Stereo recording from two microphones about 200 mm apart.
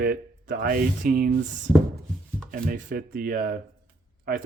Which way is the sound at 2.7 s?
45° right (ahead or behind).